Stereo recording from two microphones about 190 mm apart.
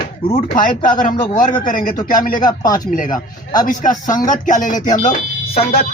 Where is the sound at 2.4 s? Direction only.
20° left (ahead or behind).